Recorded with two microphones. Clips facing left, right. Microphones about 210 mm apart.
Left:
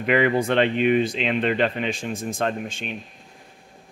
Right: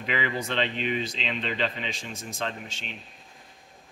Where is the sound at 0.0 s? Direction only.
55° left (ahead or behind).